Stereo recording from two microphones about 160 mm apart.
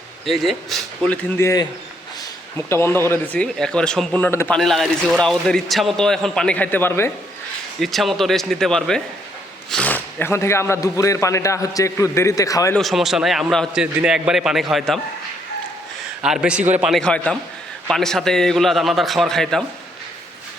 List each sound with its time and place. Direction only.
0.3 s a man's voice: centre (ahead or behind)
2.6 s speech: 15° left (ahead or behind)
4.5 s a man's voice: centre (ahead or behind)
7.8 s a man's voice: centre (ahead or behind); by 12.7 s 20° left (ahead or behind)
12.7 s a man's voice: centre (ahead or behind)
16.2 s a man's voice: 5° right (ahead or behind)
16.9 s a man's voice: 5° left (ahead or behind)